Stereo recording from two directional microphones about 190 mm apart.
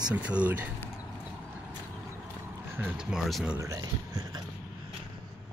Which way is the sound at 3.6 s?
20° right (ahead or behind).